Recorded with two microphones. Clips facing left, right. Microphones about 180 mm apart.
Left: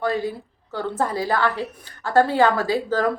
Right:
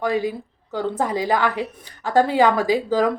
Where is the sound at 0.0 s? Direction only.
15° right (ahead or behind).